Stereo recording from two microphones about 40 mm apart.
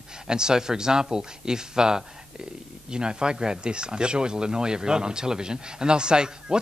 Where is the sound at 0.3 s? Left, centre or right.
Centre.